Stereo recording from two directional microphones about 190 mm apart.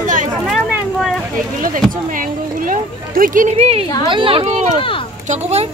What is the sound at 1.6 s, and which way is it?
Speech, 45° right (ahead or behind).